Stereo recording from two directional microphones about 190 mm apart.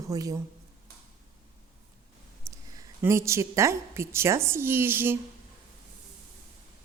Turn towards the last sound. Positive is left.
turn(degrees=-10)  # may be behind; listen again after turning